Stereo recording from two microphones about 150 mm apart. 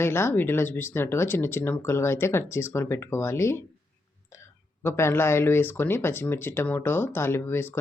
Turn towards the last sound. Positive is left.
turn(degrees=15)  # may be behind; listen again after turning